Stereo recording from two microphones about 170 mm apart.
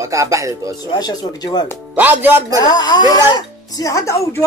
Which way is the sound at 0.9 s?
25° left (ahead or behind).